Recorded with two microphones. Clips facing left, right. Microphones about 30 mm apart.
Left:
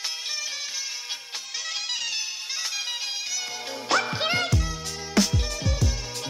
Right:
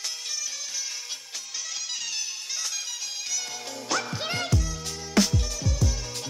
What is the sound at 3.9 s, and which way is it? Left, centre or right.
Music, left.